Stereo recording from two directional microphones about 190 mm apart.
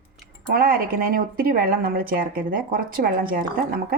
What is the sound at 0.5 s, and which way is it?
Speech, 50° right (ahead or behind).